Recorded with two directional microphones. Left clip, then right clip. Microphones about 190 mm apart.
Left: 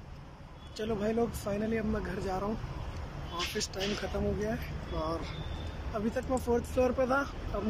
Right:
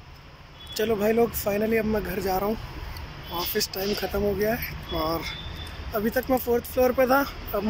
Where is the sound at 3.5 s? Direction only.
5° right (ahead or behind).